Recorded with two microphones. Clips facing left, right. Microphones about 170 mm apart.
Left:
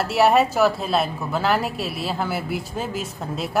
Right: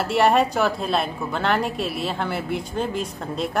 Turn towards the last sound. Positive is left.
turn(degrees=5)  # may be behind; listen again after turning